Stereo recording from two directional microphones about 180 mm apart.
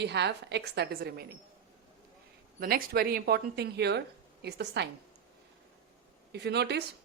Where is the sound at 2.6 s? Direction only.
55° right (ahead or behind); by 4.9 s 70° right (ahead or behind).